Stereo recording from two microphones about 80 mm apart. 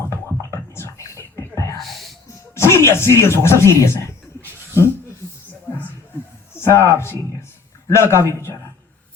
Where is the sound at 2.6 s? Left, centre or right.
Left.